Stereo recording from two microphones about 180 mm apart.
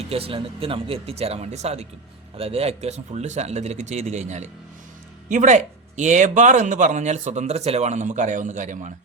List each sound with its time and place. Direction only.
0.1 s speech: 30° right (ahead or behind)